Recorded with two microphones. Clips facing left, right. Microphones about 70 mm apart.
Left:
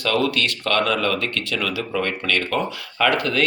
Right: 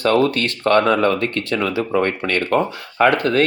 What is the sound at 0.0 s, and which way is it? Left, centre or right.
Speech, right.